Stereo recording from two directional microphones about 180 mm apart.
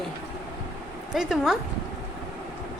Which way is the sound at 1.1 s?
Centre (ahead or behind).